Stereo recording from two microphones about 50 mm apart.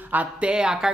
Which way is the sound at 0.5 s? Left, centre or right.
Centre.